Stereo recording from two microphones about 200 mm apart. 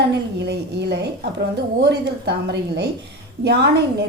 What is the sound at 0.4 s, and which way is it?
A woman's voice, 55° right (ahead or behind).